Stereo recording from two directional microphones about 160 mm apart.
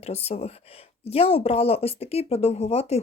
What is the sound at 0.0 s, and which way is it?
Speech, 40° left (ahead or behind).